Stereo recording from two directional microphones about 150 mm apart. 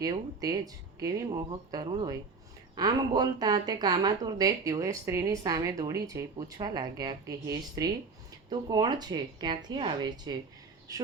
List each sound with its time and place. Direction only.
0.0 s a woman's voice: 25° right (ahead or behind)